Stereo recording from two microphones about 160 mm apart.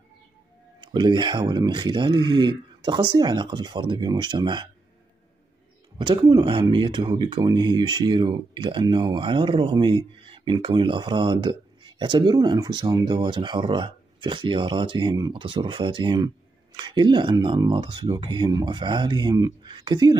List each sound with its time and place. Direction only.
0.7 s speech: 30° right (ahead or behind)
5.9 s speech: 30° right (ahead or behind)